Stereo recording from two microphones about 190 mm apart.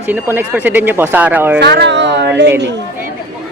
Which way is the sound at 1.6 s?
60° right (ahead or behind).